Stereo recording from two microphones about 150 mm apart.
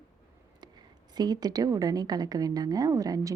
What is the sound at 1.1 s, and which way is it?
A woman's voice, 25° right (ahead or behind).